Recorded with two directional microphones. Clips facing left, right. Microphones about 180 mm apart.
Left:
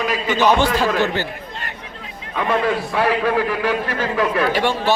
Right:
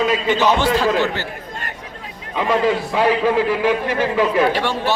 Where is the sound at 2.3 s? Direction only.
20° right (ahead or behind).